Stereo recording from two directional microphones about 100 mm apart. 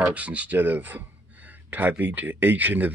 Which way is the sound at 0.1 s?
15° right (ahead or behind).